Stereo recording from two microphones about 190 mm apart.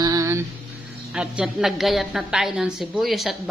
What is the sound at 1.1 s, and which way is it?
A woman's voice, 5° right (ahead or behind).